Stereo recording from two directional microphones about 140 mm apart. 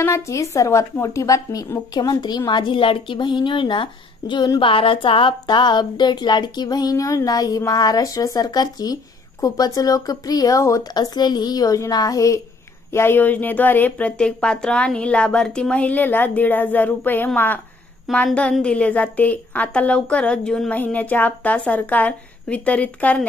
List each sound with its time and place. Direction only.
0.0 s speech: 20° left (ahead or behind)